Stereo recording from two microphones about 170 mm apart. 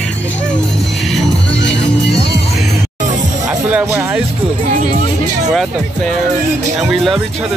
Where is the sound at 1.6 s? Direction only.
90° left.